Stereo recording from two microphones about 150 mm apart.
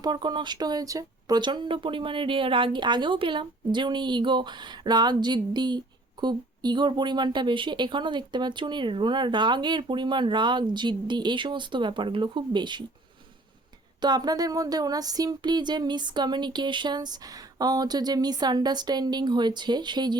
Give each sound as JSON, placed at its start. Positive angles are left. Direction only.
{"t": 0.0, "sound": "speech", "side_deg": -30}
{"t": 14.0, "sound": "a woman's voice", "side_deg": -30}